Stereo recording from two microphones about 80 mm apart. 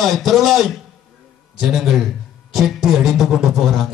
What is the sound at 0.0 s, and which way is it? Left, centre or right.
A man's voice, centre.